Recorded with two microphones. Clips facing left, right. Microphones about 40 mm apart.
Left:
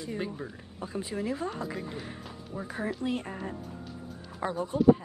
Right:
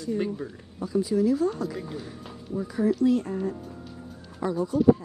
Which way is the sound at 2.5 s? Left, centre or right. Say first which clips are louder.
Right 9 dB; left.